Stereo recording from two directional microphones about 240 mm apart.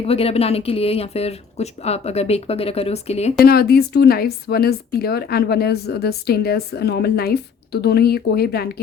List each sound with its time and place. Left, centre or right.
0.1 s speech: left
3.4 s a woman's voice: left